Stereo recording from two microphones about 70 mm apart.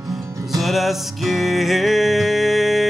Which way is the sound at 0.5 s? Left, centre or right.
Centre.